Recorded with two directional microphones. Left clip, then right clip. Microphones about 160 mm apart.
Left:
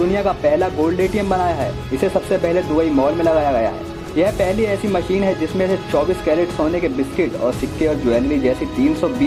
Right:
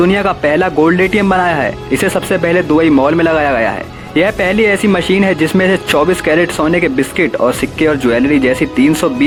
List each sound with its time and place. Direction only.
0.1 s speech: 35° right (ahead or behind)